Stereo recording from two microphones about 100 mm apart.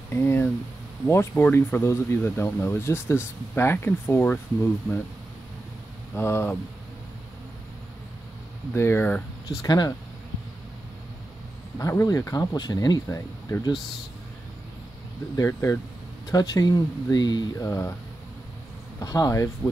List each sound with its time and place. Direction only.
0.1 s a sound: 20° left (ahead or behind)
1.0 s speech: 25° left (ahead or behind)
6.1 s speech: 25° left (ahead or behind)
8.7 s speech: 25° left (ahead or behind)
9.6 s speech: 45° left (ahead or behind)
11.8 s speech: 30° left (ahead or behind)
15.3 s speech: 30° left (ahead or behind)
16.3 s speech: 40° left (ahead or behind)
17.6 s speech: 25° left (ahead or behind)
18.9 s speech: 40° left (ahead or behind)